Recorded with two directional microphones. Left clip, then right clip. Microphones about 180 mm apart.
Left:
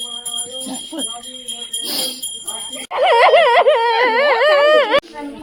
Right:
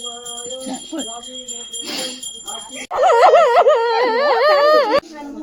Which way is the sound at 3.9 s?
10° right (ahead or behind).